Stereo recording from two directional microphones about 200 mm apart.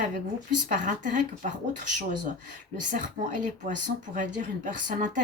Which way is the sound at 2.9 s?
40° right (ahead or behind).